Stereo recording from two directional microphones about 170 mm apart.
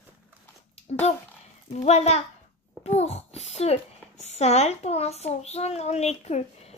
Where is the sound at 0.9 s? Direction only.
45° left (ahead or behind).